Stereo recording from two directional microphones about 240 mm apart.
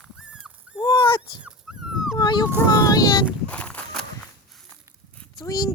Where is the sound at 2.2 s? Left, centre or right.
Centre.